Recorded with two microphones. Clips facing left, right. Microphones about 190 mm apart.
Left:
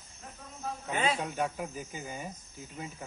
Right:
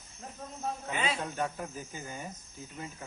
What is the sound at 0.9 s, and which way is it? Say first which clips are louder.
Speech: left 4 dB; 45° left (ahead or behind).